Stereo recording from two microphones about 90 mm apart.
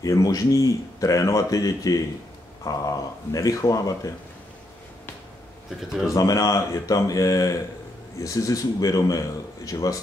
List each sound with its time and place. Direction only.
0.0 s a man's voice: 40° left (ahead or behind)
6.1 s a man's voice: 40° left (ahead or behind)